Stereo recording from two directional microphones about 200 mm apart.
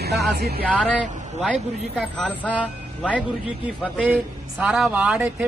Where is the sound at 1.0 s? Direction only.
35° right (ahead or behind).